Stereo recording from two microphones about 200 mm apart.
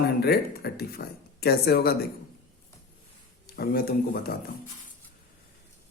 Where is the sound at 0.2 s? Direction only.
50° left (ahead or behind).